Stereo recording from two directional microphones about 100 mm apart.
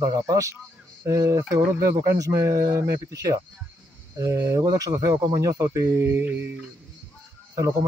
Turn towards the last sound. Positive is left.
turn(degrees=-35)  # may be behind; listen again after turning